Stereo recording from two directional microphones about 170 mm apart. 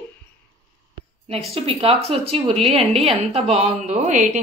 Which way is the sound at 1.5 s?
35° right (ahead or behind).